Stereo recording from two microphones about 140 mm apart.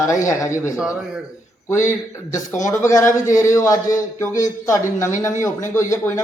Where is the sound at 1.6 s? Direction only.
20° left (ahead or behind).